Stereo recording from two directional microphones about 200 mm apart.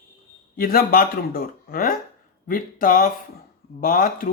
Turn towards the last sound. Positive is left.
turn(degrees=40)  # may be behind; listen again after turning